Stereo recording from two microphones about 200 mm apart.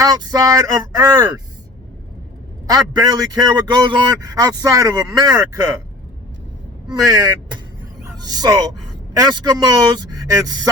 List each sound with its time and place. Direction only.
0.0 s speech: 20° right (ahead or behind)
2.6 s a man's voice: 20° right (ahead or behind)
6.8 s a man's voice: 20° right (ahead or behind)